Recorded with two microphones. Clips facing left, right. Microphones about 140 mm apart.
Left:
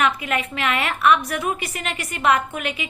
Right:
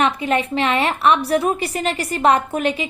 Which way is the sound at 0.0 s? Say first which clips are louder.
Right 4 dB; 30° right (ahead or behind).